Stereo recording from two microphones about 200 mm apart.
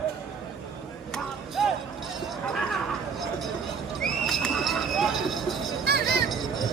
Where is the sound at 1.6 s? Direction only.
Centre (ahead or behind).